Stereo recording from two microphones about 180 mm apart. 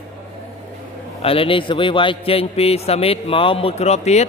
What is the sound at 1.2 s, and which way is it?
A man's voice, 30° left (ahead or behind).